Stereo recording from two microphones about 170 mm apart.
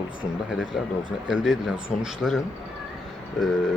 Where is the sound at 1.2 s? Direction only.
5° right (ahead or behind).